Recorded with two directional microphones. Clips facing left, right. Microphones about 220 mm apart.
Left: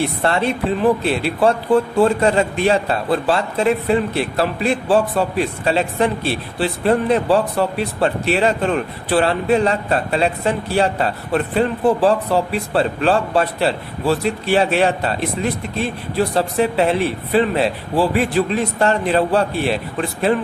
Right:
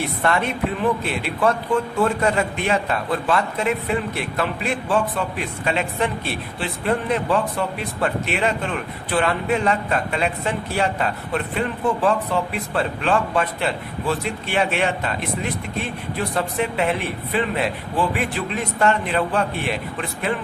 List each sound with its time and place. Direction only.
0.0 s speech: 30° left (ahead or behind)